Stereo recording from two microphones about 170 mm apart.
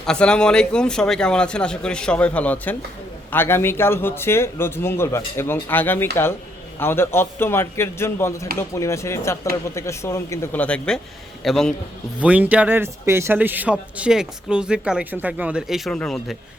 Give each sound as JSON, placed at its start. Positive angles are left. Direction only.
{"t": 0.0, "sound": "speech", "side_deg": 5}
{"t": 12.2, "sound": "a man's voice", "side_deg": -10}